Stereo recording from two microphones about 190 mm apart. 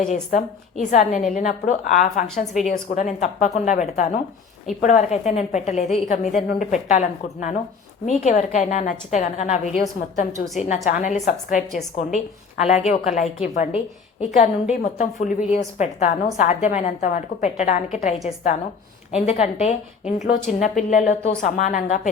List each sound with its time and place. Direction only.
0.1 s a woman's voice: 40° left (ahead or behind)